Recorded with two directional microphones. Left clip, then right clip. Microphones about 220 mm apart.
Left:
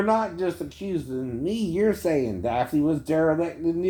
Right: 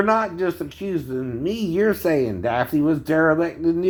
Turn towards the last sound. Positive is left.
turn(degrees=-10)  # may be behind; listen again after turning